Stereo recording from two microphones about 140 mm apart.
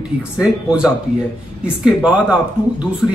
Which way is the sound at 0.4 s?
5° right (ahead or behind).